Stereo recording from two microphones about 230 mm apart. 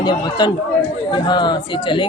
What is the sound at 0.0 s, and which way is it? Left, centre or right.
Speech, centre.